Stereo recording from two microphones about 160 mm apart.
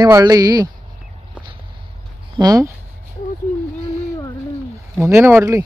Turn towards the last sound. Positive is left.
turn(degrees=-15)  # may be behind; listen again after turning